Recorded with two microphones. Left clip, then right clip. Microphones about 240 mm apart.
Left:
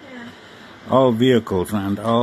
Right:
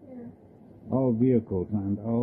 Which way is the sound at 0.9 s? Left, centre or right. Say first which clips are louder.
Left 10 dB; left.